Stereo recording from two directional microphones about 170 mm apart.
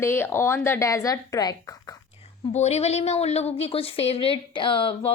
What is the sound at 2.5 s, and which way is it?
A woman's voice, 40° left (ahead or behind).